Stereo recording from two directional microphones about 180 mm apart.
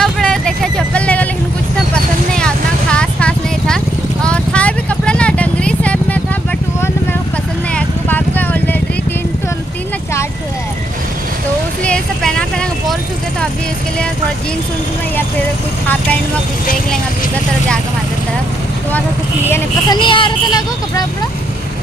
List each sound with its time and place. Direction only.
0.0 s vehicle: 5° left (ahead or behind)
2.3 s vehicle: 5° left (ahead or behind)
7.7 s vehicle: 10° left (ahead or behind)
11.8 s vehicle: 5° left (ahead or behind)
19.5 s vehicle: 25° left (ahead or behind)